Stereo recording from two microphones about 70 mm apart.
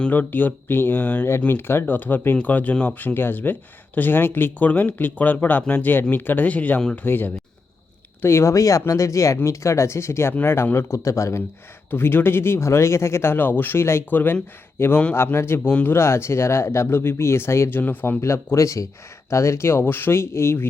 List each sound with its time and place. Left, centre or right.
0.1 s speech: left
8.2 s speech: left
11.9 s speech: left
16.0 s speech: left
18.2 s speech: left